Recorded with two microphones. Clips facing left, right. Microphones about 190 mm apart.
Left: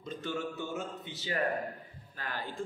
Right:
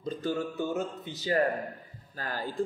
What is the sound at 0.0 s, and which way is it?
A man's voice, 35° right (ahead or behind).